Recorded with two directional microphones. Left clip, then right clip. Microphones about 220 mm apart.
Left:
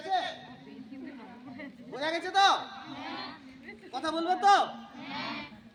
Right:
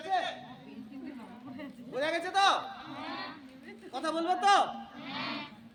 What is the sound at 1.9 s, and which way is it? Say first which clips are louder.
Speech: left 2 dB; 20° right (ahead or behind).